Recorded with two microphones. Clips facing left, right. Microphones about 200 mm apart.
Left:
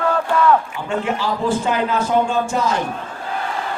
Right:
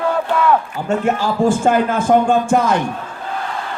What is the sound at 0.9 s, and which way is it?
Speech, 45° right (ahead or behind).